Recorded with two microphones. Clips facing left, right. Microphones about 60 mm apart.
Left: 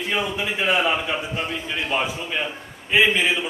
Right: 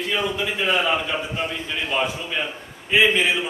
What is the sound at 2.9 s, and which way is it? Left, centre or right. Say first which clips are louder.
Speech: right 1 dB; centre.